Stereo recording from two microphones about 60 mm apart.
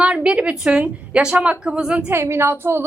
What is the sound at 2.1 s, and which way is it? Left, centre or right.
Speech, right.